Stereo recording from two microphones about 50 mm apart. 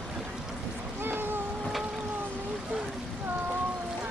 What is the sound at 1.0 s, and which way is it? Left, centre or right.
Boat, right.